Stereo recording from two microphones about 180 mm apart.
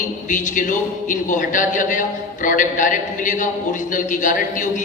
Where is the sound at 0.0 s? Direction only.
45° left (ahead or behind).